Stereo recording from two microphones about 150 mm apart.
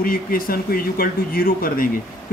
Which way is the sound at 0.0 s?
75° left (ahead or behind).